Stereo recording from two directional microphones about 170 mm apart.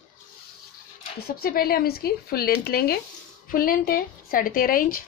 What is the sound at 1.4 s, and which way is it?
Speech, 60° left (ahead or behind).